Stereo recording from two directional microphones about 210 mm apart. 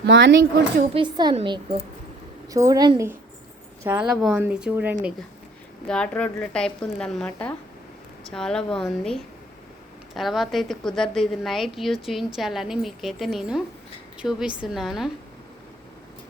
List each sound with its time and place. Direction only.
0.0 s speech: 55° right (ahead or behind)
0.9 s a woman's voice: 20° right (ahead or behind)
3.8 s a woman's voice: 5° right (ahead or behind)
5.9 s a woman's voice: 5° left (ahead or behind)